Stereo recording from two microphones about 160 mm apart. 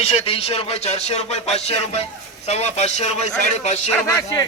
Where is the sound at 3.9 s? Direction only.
20° left (ahead or behind).